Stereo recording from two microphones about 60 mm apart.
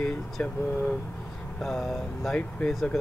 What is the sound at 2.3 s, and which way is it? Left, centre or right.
Speech, centre.